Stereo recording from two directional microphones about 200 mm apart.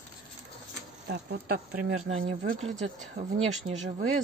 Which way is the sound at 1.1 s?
50° right (ahead or behind).